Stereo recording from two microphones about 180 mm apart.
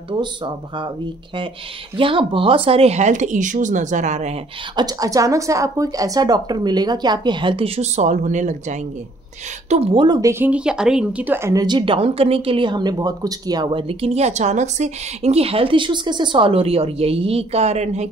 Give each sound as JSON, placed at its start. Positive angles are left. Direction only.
{"t": 0.1, "sound": "a woman's voice", "side_deg": -25}
{"t": 4.7, "sound": "a woman's voice", "side_deg": -20}
{"t": 10.4, "sound": "a woman's voice", "side_deg": -5}